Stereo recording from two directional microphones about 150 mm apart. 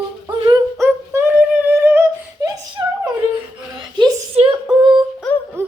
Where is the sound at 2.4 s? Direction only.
25° right (ahead or behind).